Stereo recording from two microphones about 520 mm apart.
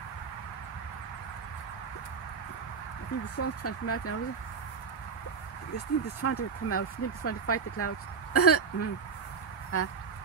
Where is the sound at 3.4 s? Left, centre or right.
Left.